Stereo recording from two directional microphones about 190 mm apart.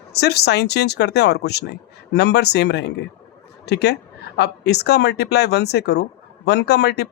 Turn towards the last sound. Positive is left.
turn(degrees=60)  # may be behind; listen again after turning